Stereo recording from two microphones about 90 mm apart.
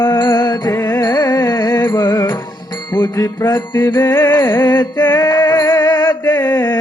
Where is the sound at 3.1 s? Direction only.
35° left (ahead or behind).